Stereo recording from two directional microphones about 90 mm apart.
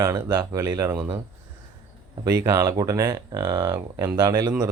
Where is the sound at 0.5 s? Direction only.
30° right (ahead or behind).